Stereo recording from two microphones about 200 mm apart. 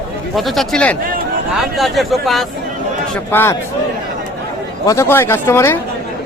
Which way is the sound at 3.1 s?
10° left (ahead or behind).